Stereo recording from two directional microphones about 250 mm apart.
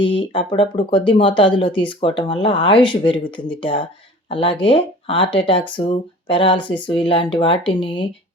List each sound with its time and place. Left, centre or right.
0.0 s speech: left